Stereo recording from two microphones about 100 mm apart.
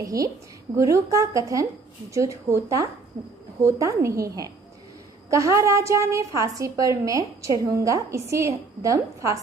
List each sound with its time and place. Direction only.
0.0 s a woman's voice: 35° right (ahead or behind)